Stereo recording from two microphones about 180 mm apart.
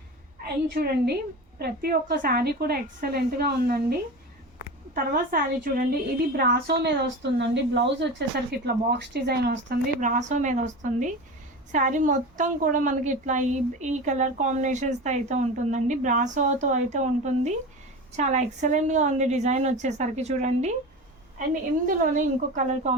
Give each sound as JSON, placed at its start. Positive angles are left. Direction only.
{"t": 0.7, "sound": "a woman's voice", "side_deg": -60}
{"t": 4.9, "sound": "a woman's voice", "side_deg": -50}
{"t": 6.3, "sound": "a woman's voice", "side_deg": -60}
{"t": 9.5, "sound": "a woman's voice", "side_deg": -50}
{"t": 21.8, "sound": "a woman's voice", "side_deg": -45}